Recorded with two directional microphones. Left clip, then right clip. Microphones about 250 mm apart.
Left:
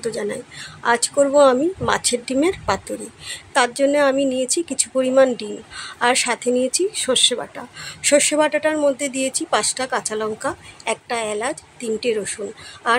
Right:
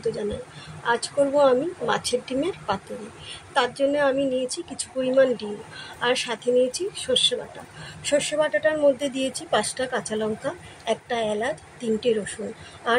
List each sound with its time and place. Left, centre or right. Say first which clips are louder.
0.8 s speech: left 5 dB; left